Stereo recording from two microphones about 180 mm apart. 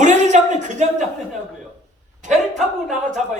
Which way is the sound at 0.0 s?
40° right (ahead or behind).